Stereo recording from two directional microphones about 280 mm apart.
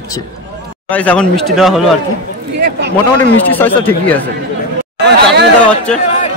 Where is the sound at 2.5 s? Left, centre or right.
Right.